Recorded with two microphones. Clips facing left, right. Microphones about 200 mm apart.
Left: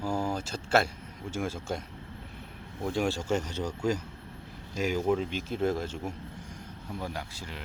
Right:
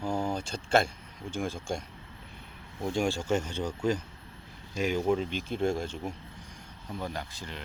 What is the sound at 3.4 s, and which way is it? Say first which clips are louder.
Speech: even; 40° left (ahead or behind).